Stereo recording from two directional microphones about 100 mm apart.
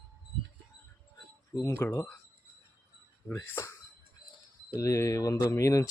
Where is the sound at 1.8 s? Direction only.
25° left (ahead or behind).